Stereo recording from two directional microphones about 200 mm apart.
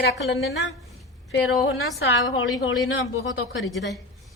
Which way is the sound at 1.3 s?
75° left (ahead or behind).